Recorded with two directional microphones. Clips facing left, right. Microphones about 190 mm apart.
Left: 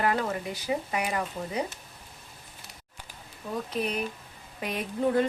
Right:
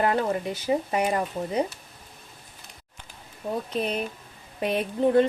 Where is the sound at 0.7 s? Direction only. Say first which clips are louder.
Right 5 dB; 30° right (ahead or behind).